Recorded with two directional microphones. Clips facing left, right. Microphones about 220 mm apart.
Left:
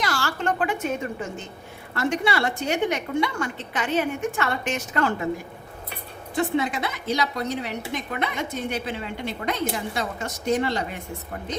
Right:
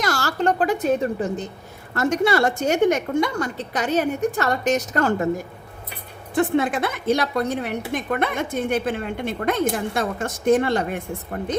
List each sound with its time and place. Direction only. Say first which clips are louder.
0.0 s a sound: right 4 dB; 40° right (ahead or behind)
2.0 s a woman's voice: right 5 dB; 45° right (ahead or behind)
6.3 s a woman's voice: right 4 dB; 50° right (ahead or behind)